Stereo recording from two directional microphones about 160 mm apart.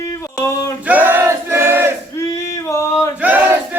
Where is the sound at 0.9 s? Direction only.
10° right (ahead or behind).